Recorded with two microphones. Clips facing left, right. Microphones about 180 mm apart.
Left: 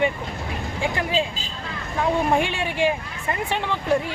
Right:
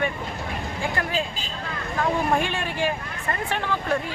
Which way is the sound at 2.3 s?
15° left (ahead or behind).